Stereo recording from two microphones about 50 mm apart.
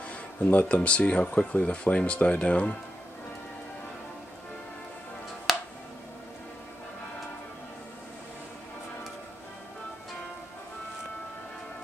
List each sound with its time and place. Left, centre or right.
0.1 s speech: left
5.5 s finger snapping: centre